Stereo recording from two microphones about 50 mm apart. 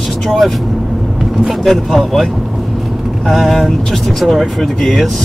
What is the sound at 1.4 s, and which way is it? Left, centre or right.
Speech, centre.